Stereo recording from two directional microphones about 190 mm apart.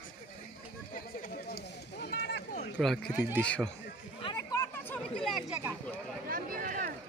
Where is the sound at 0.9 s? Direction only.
50° left (ahead or behind).